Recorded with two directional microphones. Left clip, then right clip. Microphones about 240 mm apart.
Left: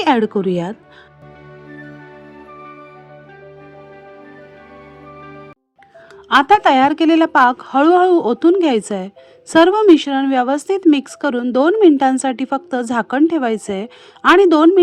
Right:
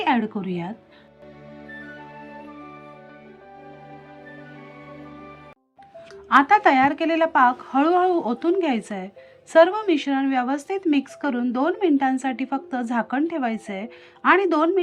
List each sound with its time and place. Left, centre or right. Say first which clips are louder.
0.0 s a woman's voice: left 8 dB; left
6.2 s a woman's voice: left 5 dB; left